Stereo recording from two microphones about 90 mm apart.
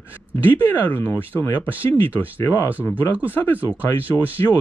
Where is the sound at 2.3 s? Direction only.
25° left (ahead or behind).